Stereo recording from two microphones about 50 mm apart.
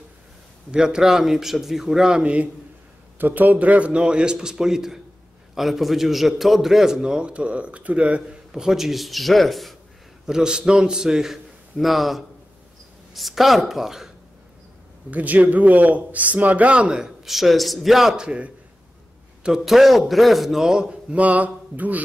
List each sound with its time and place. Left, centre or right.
0.7 s a man's voice: centre
3.2 s a man's voice: right; by 9.8 s centre
10.2 s a man's voice: centre
15.0 s speech: right
16.9 s speech: centre
18.1 s a man's voice: centre
19.6 s speech: centre
21.1 s speech: right